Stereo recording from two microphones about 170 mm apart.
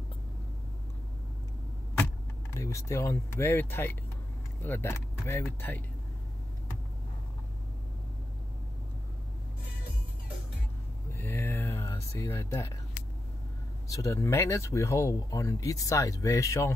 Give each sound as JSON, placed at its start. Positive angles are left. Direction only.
{"t": 2.5, "sound": "speech", "side_deg": 15}
{"t": 11.1, "sound": "a sound", "side_deg": 15}
{"t": 13.8, "sound": "speech", "side_deg": 20}